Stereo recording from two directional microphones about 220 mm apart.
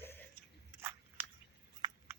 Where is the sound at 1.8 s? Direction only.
20° right (ahead or behind).